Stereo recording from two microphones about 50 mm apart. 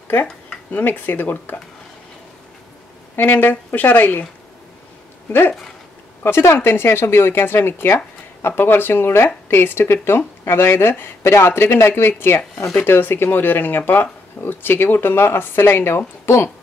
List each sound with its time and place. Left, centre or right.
0.7 s speech: left
3.2 s speech: left
6.2 s speech: left